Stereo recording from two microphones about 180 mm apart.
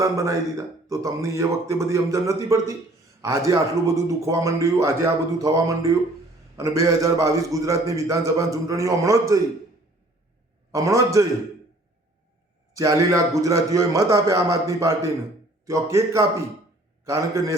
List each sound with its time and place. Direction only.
0.0 s a man's voice: 15° right (ahead or behind)
10.7 s a man's voice: 20° right (ahead or behind)
12.7 s a man's voice: 20° right (ahead or behind)